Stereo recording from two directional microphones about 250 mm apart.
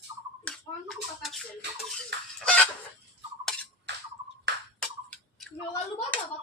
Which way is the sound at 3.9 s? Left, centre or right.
Right.